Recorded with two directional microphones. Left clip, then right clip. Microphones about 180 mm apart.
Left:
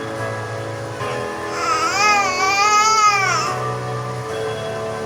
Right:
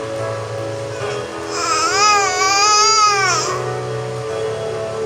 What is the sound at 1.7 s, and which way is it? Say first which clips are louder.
Baby cry: right 2 dB; 20° right (ahead or behind).